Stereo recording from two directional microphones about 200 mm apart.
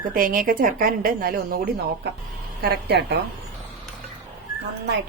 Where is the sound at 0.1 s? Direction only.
45° right (ahead or behind).